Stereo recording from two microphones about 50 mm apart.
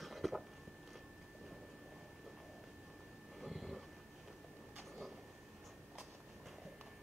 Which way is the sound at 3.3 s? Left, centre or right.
Centre.